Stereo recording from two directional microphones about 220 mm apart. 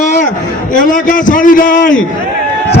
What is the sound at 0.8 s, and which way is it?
A man's voice, 35° left (ahead or behind).